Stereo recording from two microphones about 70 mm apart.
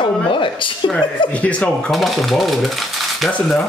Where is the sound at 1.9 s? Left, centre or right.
Centre.